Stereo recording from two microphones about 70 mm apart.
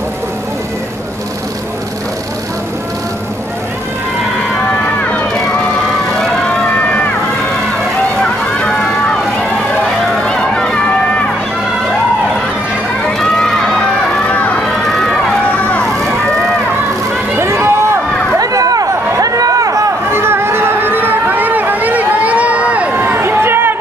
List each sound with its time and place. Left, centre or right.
6.6 s run: centre
8.2 s vehicle: centre
10.2 s run: centre
13.0 s run: centre
14.2 s run: left
17.4 s run: right
18.4 s a sound: right
20.1 s a sound: right; by 22.9 s centre
22.9 s a sound: right